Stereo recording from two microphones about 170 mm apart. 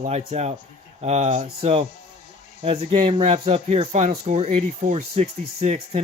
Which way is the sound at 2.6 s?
35° right (ahead or behind).